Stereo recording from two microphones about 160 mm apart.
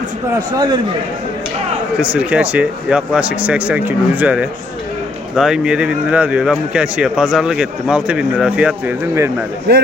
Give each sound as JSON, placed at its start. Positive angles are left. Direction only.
{"t": 0.5, "sound": "a man's voice", "side_deg": -25}
{"t": 2.0, "sound": "a man's voice", "side_deg": -10}